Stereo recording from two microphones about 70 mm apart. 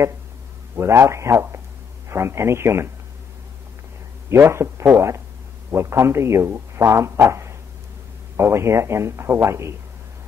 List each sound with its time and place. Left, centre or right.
0.7 s a man's voice: right
4.3 s a man's voice: right